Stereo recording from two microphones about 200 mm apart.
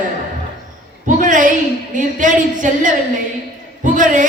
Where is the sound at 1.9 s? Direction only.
40° right (ahead or behind).